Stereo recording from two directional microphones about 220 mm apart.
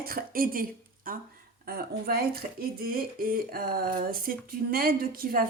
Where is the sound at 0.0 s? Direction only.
40° right (ahead or behind).